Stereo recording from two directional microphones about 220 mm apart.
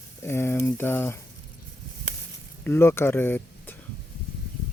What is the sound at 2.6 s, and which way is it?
Speech, 10° left (ahead or behind).